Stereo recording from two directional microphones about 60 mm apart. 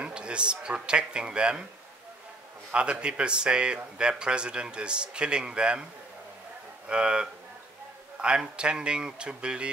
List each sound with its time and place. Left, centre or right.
0.0 s a man's voice: centre
2.7 s speech: centre
6.9 s speech: centre